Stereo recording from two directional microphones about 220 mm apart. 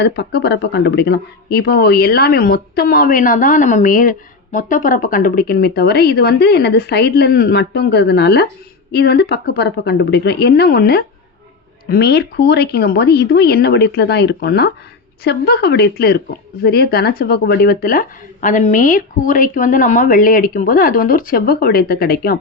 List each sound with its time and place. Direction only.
0.0 s speech: 50° left (ahead or behind)